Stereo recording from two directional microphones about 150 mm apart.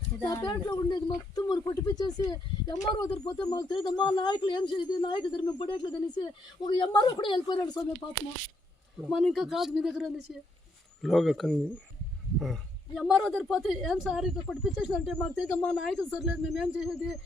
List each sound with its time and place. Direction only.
0.2 s speech: 20° left (ahead or behind)
9.0 s a woman's voice: centre (ahead or behind)